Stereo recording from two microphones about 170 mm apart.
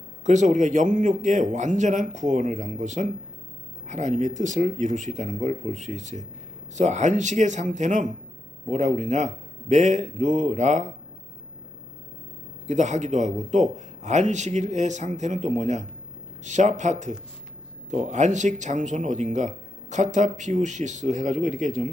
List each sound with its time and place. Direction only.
0.3 s speech: 45° right (ahead or behind)
12.6 s speech: 45° right (ahead or behind)